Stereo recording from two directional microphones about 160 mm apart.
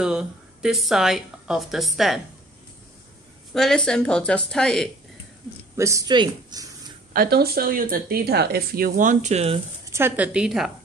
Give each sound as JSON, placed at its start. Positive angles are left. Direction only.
{"t": 0.0, "sound": "speech", "side_deg": -5}
{"t": 3.5, "sound": "a woman's voice", "side_deg": 5}
{"t": 5.8, "sound": "speech", "side_deg": -20}
{"t": 7.2, "sound": "speech", "side_deg": -75}
{"t": 9.8, "sound": "a woman's voice", "side_deg": -15}